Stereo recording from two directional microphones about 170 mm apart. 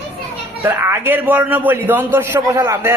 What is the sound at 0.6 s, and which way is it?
A man's voice, 15° right (ahead or behind).